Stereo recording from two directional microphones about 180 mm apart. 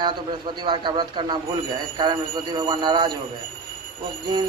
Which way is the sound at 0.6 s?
25° right (ahead or behind).